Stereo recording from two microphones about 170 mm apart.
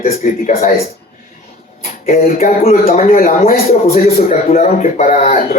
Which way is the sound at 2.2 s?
55° left (ahead or behind).